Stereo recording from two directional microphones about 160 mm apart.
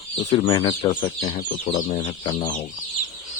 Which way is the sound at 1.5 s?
55° left (ahead or behind).